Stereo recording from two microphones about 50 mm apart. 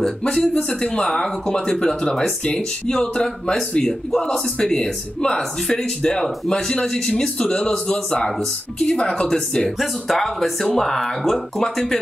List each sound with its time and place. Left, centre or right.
0.0 s speech: centre
9.8 s speech: centre